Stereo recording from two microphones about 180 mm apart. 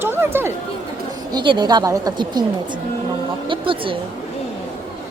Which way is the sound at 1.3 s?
25° right (ahead or behind).